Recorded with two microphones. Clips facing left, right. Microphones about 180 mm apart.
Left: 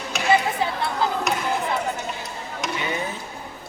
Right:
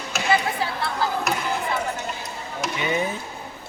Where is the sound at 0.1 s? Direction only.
Centre (ahead or behind).